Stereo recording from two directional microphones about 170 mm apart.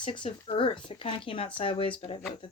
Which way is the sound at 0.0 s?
30° left (ahead or behind).